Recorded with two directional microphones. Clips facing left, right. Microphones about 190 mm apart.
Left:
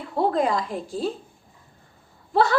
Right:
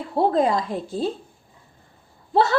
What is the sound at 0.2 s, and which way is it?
Speech, 25° right (ahead or behind).